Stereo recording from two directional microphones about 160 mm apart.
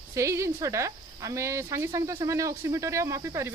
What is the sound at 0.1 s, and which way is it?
Speech, 20° right (ahead or behind).